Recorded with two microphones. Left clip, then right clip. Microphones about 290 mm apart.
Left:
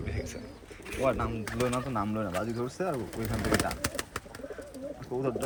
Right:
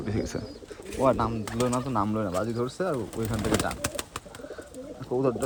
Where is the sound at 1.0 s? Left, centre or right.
Centre.